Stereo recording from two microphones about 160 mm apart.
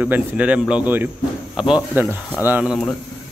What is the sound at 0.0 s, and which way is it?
Speech, 10° right (ahead or behind).